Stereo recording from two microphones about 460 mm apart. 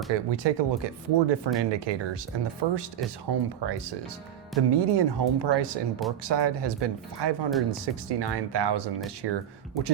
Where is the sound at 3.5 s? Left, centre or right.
Right.